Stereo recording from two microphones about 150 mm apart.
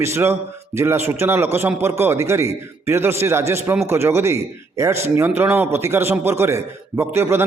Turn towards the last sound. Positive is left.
turn(degrees=-15)  # may be behind; listen again after turning